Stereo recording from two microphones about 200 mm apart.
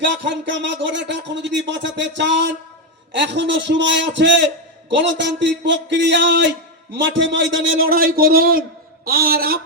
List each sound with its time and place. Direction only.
0.0 s a man's voice: 60° right (ahead or behind); by 7.9 s 80° right
7.9 s a man's voice: 45° right (ahead or behind)